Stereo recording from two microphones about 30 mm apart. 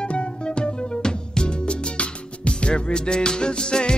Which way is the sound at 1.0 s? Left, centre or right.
Left.